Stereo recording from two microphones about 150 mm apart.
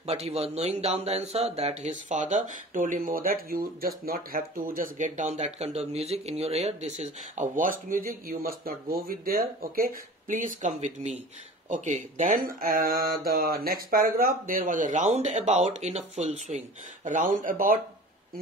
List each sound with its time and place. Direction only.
0.0 s speech: 45° right (ahead or behind); by 17.7 s 65° right (ahead or behind)